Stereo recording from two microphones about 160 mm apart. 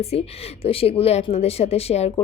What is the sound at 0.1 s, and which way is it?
Speech, 40° left (ahead or behind).